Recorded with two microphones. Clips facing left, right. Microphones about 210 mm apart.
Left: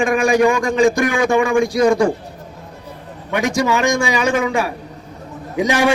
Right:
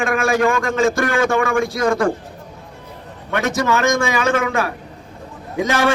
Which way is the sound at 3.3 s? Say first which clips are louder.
Left 1 dB; 15° left (ahead or behind).